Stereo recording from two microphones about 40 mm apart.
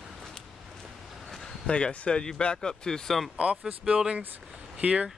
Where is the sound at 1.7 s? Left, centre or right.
Left.